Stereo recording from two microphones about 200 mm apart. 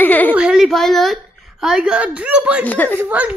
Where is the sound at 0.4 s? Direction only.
5° right (ahead or behind).